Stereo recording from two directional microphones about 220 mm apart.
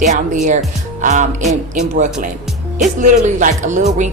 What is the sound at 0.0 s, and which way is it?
Speech, 35° right (ahead or behind).